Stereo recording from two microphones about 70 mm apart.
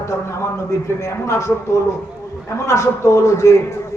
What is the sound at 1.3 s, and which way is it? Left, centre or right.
A man's voice, left.